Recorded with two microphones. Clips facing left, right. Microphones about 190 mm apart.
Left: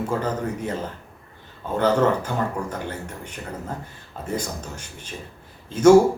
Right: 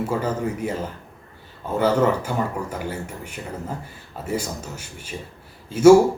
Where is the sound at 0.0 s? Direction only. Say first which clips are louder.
Right 1 dB; 10° right (ahead or behind).